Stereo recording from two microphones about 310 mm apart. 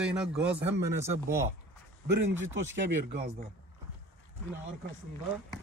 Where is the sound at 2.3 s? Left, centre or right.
Right.